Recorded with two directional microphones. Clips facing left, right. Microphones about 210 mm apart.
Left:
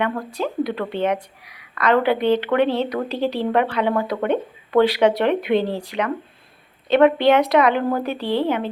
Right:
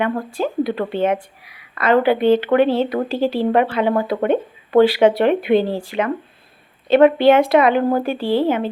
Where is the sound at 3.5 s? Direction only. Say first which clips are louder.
Right 2 dB; 30° right (ahead or behind).